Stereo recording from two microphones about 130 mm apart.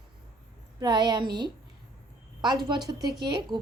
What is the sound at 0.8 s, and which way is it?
Speech, 35° right (ahead or behind).